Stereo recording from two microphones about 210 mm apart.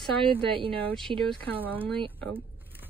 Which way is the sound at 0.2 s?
25° right (ahead or behind).